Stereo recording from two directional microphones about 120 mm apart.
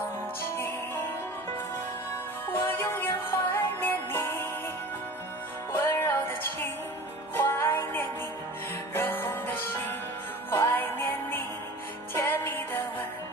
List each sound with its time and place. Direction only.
2.5 s music: 20° left (ahead or behind)
5.7 s music: 20° left (ahead or behind)